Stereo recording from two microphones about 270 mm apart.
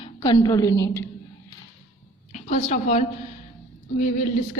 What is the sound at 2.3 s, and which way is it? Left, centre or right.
Speech, left.